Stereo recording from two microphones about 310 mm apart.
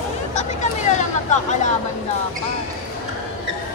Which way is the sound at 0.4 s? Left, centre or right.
Left.